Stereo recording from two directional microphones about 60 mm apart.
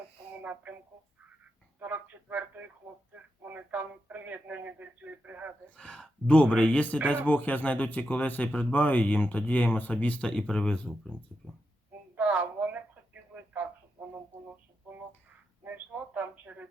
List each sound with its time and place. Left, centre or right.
0.4 s speech: right
1.8 s speech: right
5.7 s speech: centre
12.1 s a sound: right
15.6 s a man's voice: right